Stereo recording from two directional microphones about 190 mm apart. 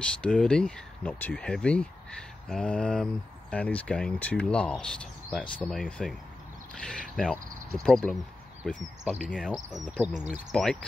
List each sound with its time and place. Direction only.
0.0 s speech: 5° left (ahead or behind)
10.5 s speech: 5° left (ahead or behind)